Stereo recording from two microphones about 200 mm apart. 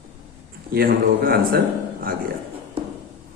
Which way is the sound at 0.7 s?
45° right (ahead or behind).